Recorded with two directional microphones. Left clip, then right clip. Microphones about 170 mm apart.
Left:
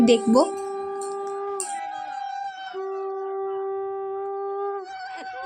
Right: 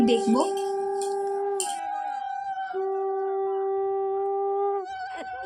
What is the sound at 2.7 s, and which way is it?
Howl, 40° right (ahead or behind).